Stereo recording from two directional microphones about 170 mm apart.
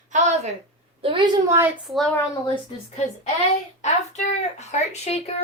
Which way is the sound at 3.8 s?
40° left (ahead or behind).